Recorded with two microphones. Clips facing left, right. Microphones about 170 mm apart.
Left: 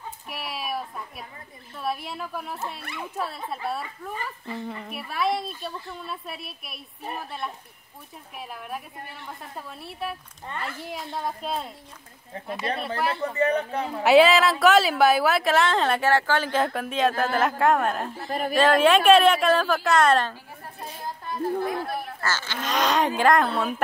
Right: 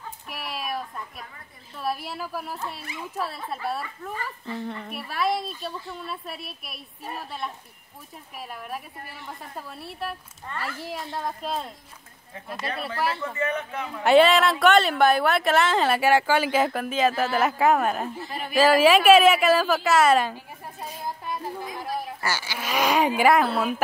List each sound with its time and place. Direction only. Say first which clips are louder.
0.3 s a woman's voice: even; centre (ahead or behind)
13.2 s speech: left 5 dB; 35° left (ahead or behind)
14.0 s a woman's voice: even; centre (ahead or behind)
20.8 s a sound: right 2 dB; 10° right (ahead or behind)
22.2 s speech: even; 10° right (ahead or behind)